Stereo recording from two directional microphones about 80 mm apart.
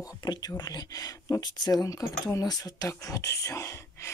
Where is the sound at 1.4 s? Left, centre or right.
Left.